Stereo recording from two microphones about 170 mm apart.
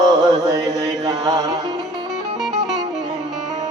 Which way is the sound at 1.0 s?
20° right (ahead or behind).